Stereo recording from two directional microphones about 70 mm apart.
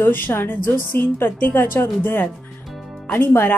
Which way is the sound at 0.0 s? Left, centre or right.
Left.